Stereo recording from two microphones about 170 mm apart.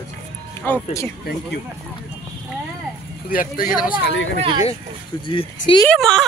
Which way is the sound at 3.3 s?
55° left (ahead or behind).